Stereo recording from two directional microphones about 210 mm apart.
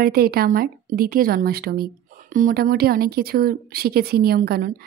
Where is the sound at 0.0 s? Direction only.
45° right (ahead or behind).